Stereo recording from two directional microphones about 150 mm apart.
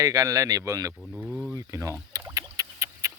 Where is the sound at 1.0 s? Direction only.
5° right (ahead or behind); by 1.9 s 20° right (ahead or behind).